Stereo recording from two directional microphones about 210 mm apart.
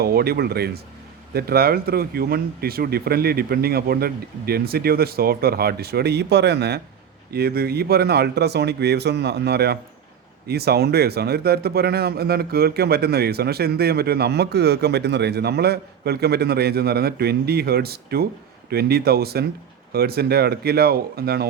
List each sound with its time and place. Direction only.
0.0 s speech: 50° right (ahead or behind)